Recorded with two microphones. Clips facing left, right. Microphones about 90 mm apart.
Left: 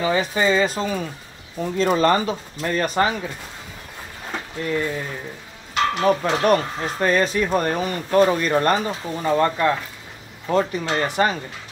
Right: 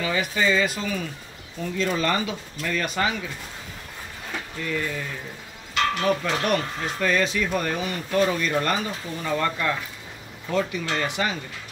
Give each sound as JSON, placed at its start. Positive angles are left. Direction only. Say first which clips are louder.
{"t": 0.0, "sound": "speech", "louder": "left 4 dB", "side_deg": 30}
{"t": 4.3, "sound": "speech", "louder": "left 4 dB", "side_deg": 40}
{"t": 6.0, "sound": "speech", "louder": "left 9 dB", "side_deg": 30}